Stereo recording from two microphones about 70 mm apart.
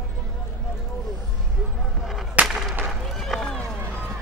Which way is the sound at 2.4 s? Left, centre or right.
Right.